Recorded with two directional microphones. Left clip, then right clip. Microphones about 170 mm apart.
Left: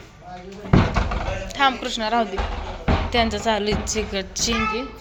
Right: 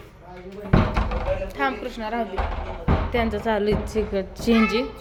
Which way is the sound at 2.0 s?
15° left (ahead or behind).